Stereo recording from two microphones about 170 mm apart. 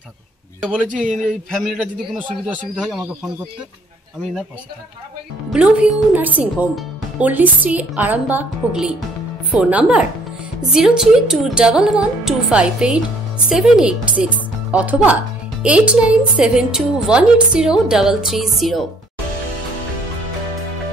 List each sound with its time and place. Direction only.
0.8 s speech: 50° right (ahead or behind)
1.2 s a woman's voice: centre (ahead or behind)
5.5 s a woman's voice: 5° right (ahead or behind)